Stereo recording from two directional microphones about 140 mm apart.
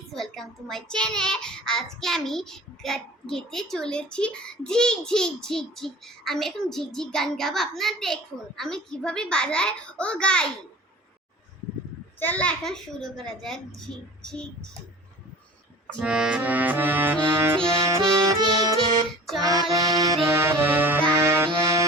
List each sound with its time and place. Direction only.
0.1 s a child's voice: centre (ahead or behind)
12.2 s a child's voice: 10° left (ahead or behind)
16.0 s music: 5° right (ahead or behind); by 18.3 s 20° right (ahead or behind)
19.4 s music: 30° right (ahead or behind)
21.2 s accordion: 20° right (ahead or behind)